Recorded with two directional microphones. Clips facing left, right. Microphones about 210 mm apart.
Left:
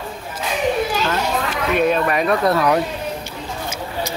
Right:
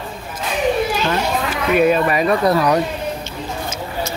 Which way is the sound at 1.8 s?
5° right (ahead or behind).